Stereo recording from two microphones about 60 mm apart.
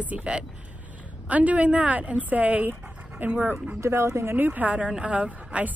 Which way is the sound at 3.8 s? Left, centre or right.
Right.